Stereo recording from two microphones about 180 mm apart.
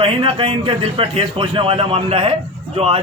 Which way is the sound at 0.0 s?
30° right (ahead or behind).